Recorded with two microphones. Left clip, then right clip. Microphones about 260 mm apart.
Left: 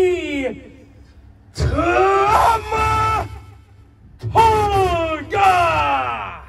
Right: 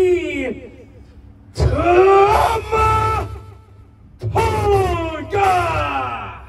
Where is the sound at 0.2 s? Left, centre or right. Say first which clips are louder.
Even; centre.